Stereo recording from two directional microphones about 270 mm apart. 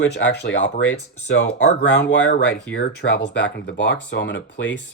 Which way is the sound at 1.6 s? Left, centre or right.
Left.